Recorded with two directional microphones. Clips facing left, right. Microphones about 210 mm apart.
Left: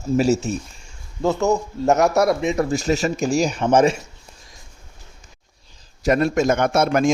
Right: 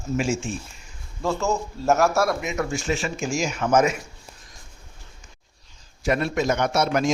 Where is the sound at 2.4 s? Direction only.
30° left (ahead or behind).